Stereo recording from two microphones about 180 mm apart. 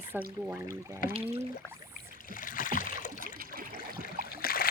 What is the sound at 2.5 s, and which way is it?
Rowboat, 50° left (ahead or behind).